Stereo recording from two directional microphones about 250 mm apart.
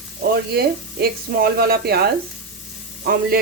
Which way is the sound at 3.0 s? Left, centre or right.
Right.